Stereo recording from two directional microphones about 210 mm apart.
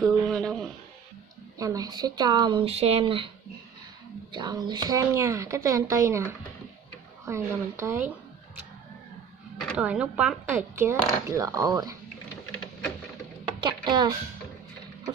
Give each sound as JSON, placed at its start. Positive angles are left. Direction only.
{"t": 0.0, "sound": "a sound", "side_deg": 0}
{"t": 1.6, "sound": "speech", "side_deg": -15}
{"t": 4.3, "sound": "a woman's voice", "side_deg": -20}
{"t": 9.6, "sound": "a woman's voice", "side_deg": 0}
{"t": 13.6, "sound": "speech", "side_deg": -20}